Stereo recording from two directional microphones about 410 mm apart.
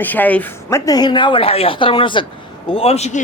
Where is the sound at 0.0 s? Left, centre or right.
Centre.